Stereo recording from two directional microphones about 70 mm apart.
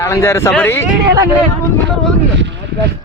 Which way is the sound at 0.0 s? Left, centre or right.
Left.